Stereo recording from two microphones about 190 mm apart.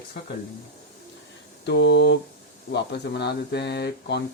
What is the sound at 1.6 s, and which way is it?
Speech, 65° left (ahead or behind).